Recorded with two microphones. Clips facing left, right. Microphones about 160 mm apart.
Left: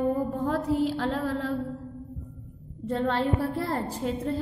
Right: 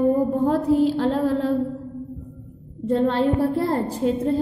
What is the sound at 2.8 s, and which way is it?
A woman's voice, 30° right (ahead or behind).